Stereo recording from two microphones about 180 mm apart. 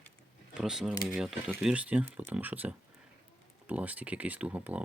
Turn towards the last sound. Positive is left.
turn(degrees=-10)  # may be behind; listen again after turning